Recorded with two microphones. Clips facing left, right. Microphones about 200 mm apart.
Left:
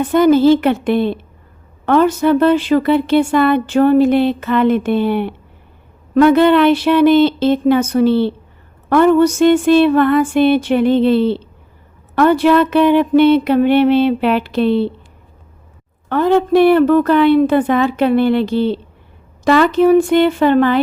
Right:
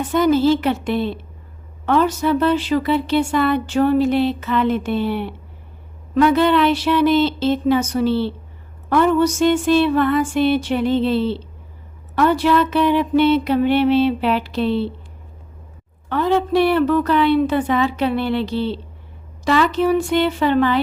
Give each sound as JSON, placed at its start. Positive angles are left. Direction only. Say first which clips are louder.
{"t": 0.0, "sound": "speech", "louder": "left 5 dB", "side_deg": 55}
{"t": 16.0, "sound": "a woman's voice", "louder": "left 5 dB", "side_deg": 50}